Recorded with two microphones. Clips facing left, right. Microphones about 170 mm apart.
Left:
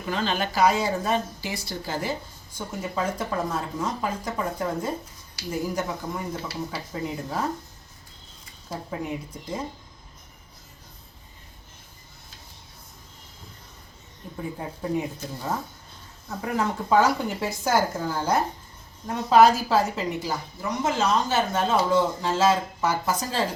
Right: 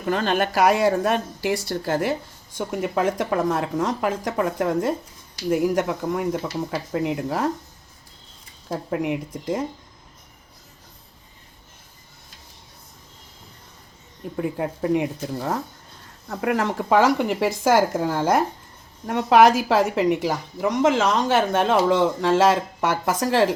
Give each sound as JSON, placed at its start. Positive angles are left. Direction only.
{"t": 0.0, "sound": "a woman's voice", "side_deg": -55}
{"t": 2.6, "sound": "speech", "side_deg": -75}
{"t": 5.5, "sound": "a woman's voice", "side_deg": -75}
{"t": 8.9, "sound": "a woman's voice", "side_deg": -75}
{"t": 14.2, "sound": "a woman's voice", "side_deg": -70}
{"t": 19.0, "sound": "a woman's voice", "side_deg": -70}